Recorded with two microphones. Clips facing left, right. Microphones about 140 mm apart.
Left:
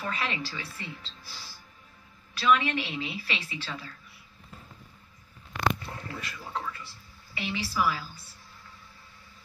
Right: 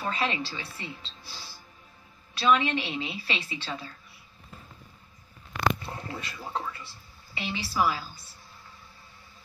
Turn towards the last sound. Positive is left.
turn(degrees=-25)  # may be behind; listen again after turning